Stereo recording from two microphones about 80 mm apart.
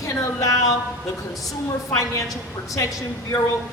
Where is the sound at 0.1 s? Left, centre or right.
Left.